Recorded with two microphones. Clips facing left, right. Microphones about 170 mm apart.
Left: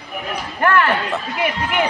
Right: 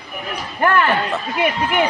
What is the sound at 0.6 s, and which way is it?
Speech, 25° right (ahead or behind).